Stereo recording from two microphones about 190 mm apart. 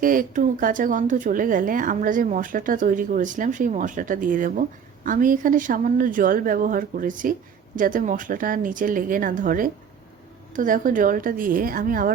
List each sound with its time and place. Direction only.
0.0 s speech: 45° right (ahead or behind)